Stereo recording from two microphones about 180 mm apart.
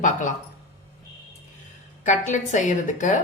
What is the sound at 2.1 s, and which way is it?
A woman's voice, 45° left (ahead or behind).